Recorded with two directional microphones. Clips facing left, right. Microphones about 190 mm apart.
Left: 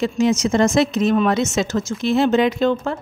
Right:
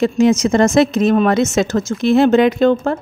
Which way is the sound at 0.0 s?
55° right (ahead or behind).